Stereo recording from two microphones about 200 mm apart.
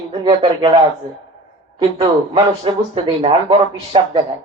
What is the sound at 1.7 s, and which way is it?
Speech, 25° right (ahead or behind).